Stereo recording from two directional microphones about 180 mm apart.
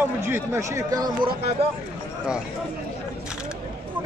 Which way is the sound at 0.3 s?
15° right (ahead or behind).